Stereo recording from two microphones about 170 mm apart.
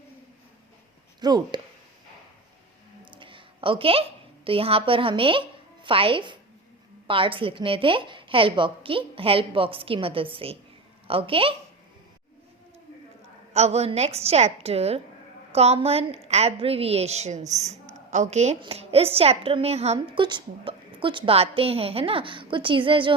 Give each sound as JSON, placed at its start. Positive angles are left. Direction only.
{"t": 1.2, "sound": "speech", "side_deg": -25}
{"t": 3.2, "sound": "a sound", "side_deg": -30}
{"t": 4.4, "sound": "a woman's voice", "side_deg": -35}
{"t": 13.5, "sound": "a woman's voice", "side_deg": -40}